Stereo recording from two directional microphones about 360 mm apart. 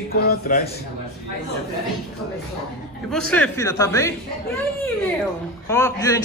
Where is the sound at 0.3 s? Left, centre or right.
Left.